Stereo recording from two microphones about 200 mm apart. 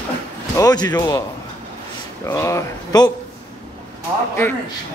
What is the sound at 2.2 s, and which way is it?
Speech, 15° left (ahead or behind).